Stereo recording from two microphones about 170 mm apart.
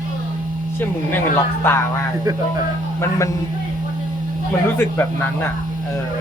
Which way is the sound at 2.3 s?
20° right (ahead or behind).